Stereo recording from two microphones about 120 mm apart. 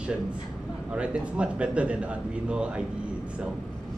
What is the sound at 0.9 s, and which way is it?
Speech, 10° right (ahead or behind).